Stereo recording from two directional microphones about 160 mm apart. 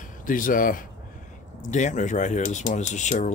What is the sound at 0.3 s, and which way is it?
Speech, 55° left (ahead or behind).